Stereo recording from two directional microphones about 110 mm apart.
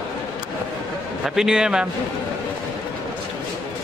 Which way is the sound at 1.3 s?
5° right (ahead or behind).